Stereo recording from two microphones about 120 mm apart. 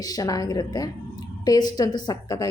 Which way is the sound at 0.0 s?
30° left (ahead or behind).